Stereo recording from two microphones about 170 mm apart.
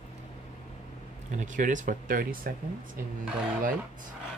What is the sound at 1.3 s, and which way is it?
Speech, 50° right (ahead or behind).